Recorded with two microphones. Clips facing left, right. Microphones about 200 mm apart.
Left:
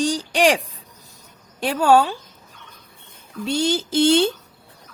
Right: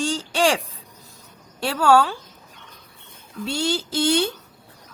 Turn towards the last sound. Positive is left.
turn(degrees=25)  # may be behind; listen again after turning